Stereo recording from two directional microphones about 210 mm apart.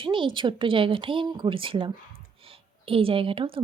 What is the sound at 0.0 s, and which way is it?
A woman's voice, 25° right (ahead or behind).